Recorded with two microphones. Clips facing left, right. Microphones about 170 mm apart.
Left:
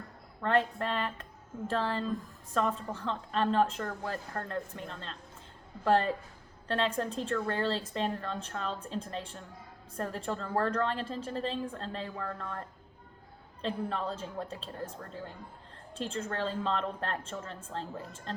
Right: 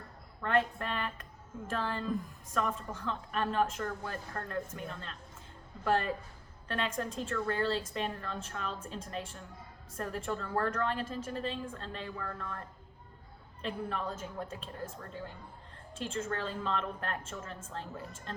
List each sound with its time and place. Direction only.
0.4 s a woman's voice: 30° left (ahead or behind)